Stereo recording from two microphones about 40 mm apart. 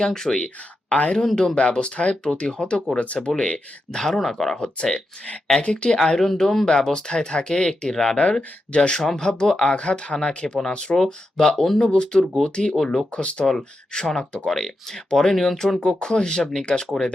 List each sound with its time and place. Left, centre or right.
0.0 s speech: centre; by 3.6 s left
3.9 s speech: centre
4.5 s speech: left
6.2 s speech: centre
6.7 s speech: centre
11.8 s speech: left
12.7 s speech: centre
13.1 s speech: left
13.4 s speech: centre